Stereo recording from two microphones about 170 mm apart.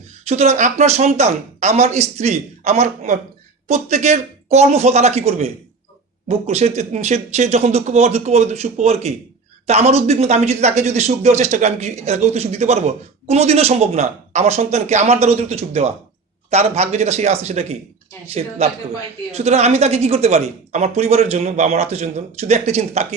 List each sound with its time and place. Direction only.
0.3 s speech: 40° right (ahead or behind)